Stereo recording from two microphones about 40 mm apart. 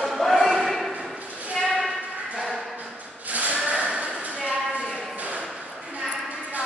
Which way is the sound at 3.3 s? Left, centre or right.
Right.